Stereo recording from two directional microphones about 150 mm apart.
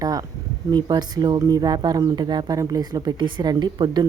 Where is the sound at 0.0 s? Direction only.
25° right (ahead or behind).